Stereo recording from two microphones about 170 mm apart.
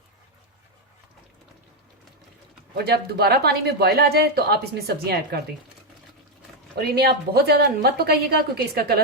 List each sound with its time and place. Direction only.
2.7 s speech: 70° right (ahead or behind)
6.9 s speech: 70° right (ahead or behind)